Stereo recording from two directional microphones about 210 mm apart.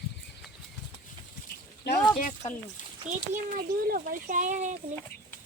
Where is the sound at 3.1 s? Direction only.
5° right (ahead or behind).